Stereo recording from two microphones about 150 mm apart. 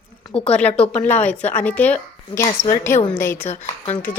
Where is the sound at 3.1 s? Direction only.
15° left (ahead or behind).